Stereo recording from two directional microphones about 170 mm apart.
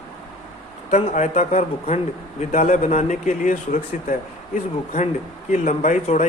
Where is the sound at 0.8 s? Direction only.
40° left (ahead or behind).